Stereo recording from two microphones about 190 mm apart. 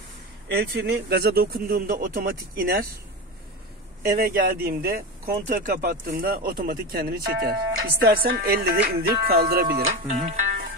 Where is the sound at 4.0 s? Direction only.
50° right (ahead or behind).